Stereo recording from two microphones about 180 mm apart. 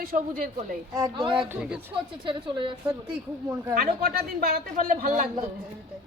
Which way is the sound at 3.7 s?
55° right (ahead or behind).